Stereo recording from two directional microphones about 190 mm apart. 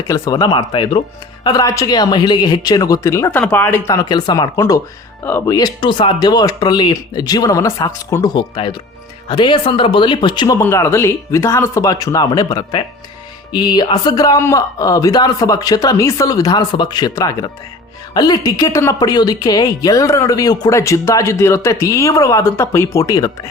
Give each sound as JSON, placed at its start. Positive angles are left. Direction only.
{"t": 0.1, "sound": "a woman's voice", "side_deg": 20}
{"t": 10.6, "sound": "a woman's voice", "side_deg": 15}